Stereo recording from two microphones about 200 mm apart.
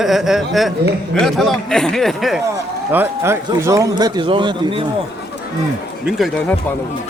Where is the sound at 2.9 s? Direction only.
10° right (ahead or behind).